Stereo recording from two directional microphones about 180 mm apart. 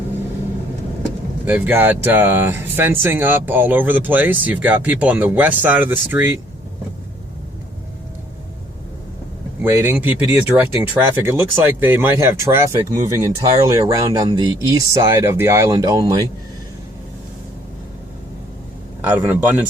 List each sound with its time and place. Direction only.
1.5 s speech: 10° right (ahead or behind)
9.6 s speech: 15° right (ahead or behind)
19.0 s speech: 10° right (ahead or behind)